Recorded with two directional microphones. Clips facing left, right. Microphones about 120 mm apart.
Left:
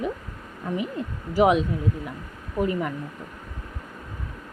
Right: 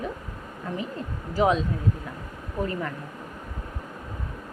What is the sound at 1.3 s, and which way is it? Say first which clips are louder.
A woman's voice: left 3 dB; 15° left (ahead or behind).